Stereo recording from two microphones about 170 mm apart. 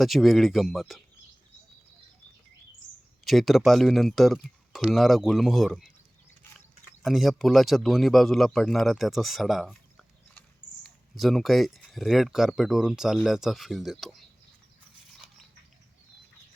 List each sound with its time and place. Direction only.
0.0 s speech: centre (ahead or behind)
3.2 s speech: centre (ahead or behind)
7.0 s speech: centre (ahead or behind)